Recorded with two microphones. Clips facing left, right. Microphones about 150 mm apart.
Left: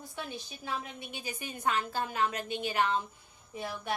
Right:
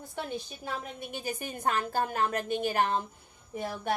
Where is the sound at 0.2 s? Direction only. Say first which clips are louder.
Right 5 dB; 50° right (ahead or behind).